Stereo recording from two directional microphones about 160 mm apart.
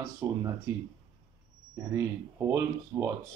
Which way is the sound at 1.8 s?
15° right (ahead or behind).